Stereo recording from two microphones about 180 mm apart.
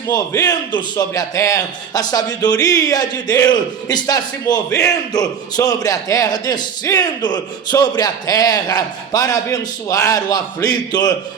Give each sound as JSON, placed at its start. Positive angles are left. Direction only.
{"t": 0.1, "sound": "a man's voice", "side_deg": 20}